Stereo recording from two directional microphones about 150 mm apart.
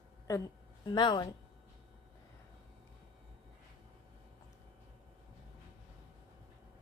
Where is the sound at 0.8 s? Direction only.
30° left (ahead or behind).